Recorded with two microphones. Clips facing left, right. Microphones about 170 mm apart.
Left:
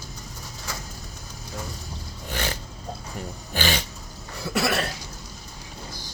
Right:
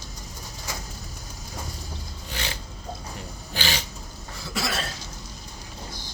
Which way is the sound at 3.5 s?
50° left (ahead or behind).